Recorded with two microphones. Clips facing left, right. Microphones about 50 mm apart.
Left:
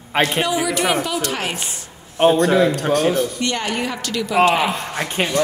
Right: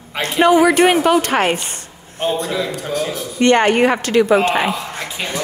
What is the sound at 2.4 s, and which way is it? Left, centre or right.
A man's voice, left.